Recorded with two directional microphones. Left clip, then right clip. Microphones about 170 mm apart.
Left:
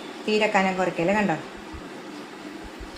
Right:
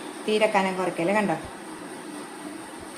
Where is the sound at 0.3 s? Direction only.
15° left (ahead or behind).